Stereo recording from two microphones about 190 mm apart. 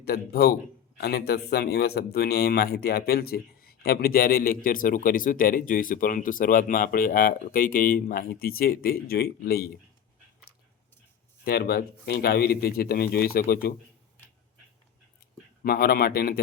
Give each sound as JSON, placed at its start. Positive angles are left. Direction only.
{"t": 0.0, "sound": "speech", "side_deg": 55}
{"t": 11.4, "sound": "speech", "side_deg": 55}
{"t": 15.6, "sound": "speech", "side_deg": 50}